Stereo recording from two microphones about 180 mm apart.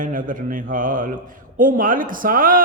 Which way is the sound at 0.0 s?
50° right (ahead or behind).